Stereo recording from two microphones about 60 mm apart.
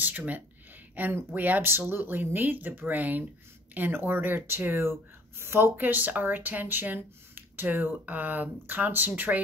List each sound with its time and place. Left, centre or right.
0.0 s speech: right
5.8 s speech: right